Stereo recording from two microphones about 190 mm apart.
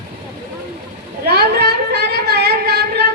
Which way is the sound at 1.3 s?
55° right (ahead or behind).